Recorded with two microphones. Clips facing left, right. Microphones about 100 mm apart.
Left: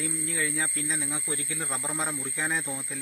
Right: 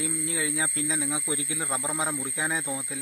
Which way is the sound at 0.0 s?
15° right (ahead or behind).